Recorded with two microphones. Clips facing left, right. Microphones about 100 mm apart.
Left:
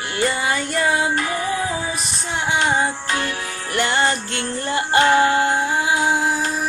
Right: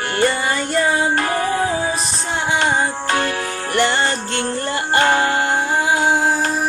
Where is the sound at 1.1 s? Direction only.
45° right (ahead or behind).